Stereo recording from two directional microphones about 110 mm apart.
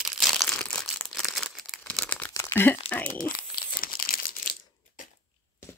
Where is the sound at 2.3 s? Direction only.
25° left (ahead or behind).